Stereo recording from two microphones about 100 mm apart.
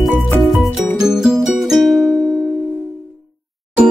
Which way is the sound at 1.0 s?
5° right (ahead or behind).